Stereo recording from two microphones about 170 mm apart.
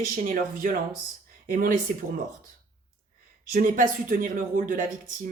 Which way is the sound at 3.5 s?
55° right (ahead or behind).